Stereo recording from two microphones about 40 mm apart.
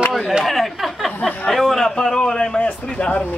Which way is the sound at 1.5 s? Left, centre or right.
Centre.